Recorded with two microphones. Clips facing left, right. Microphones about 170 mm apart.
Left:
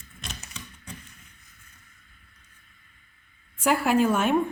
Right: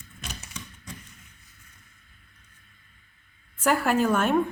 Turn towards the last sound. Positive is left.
turn(degrees=10)  # may be behind; listen again after turning